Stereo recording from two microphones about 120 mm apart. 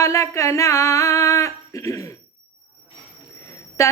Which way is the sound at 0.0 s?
25° left (ahead or behind).